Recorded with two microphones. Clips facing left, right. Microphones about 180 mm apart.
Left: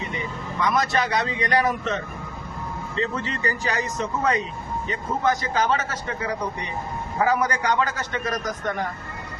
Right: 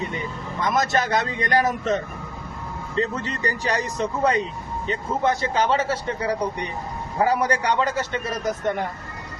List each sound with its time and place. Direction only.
0.6 s a man's voice: 45° right (ahead or behind); by 8.7 s 25° right (ahead or behind)